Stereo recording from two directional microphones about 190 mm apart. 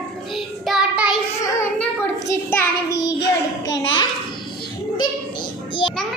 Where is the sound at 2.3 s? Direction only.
15° left (ahead or behind).